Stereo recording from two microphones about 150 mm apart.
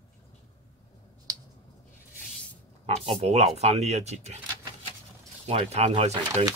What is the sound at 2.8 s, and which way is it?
Speech, 40° right (ahead or behind).